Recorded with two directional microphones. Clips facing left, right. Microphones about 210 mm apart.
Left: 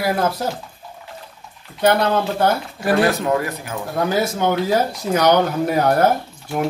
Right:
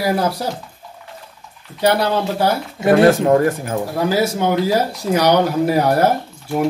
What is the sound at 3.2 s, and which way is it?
Speech, 45° right (ahead or behind).